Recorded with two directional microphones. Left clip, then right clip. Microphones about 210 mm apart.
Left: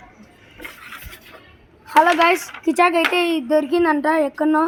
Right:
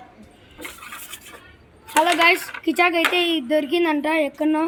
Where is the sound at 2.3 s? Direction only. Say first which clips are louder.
Left 1 dB; centre (ahead or behind).